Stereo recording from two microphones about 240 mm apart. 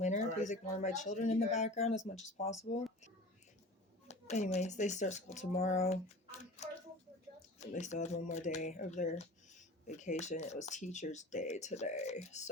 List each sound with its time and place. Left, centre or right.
0.0 s speech: left
4.1 s speech: left
6.6 s a sound: left
7.6 s speech: left